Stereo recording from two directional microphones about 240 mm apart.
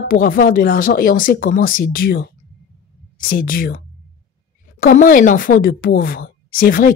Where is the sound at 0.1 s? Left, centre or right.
Left.